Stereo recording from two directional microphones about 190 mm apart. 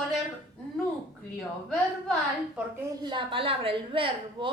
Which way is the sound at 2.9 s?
25° right (ahead or behind).